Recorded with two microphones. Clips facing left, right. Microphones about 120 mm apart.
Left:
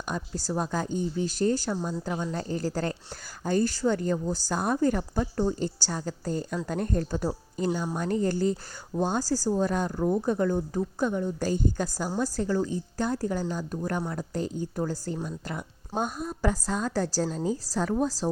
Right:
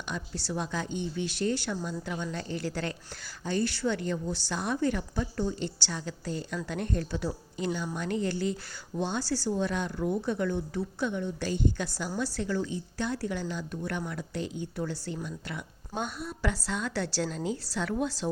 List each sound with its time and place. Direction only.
0.1 s a woman's voice: 40° left (ahead or behind)